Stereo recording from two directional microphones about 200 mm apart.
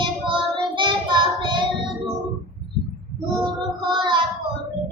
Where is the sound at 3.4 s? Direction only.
25° right (ahead or behind).